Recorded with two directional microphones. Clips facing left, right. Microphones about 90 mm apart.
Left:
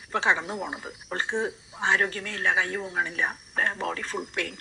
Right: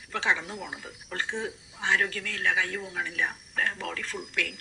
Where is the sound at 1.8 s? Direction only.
30° left (ahead or behind).